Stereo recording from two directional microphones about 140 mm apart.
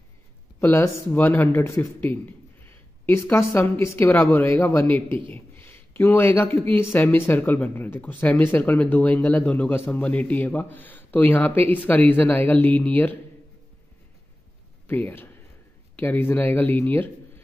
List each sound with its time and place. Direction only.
0.6 s speech: 15° left (ahead or behind)
14.9 s a man's voice: 15° left (ahead or behind)